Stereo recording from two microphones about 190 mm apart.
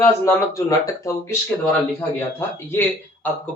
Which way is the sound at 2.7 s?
10° left (ahead or behind).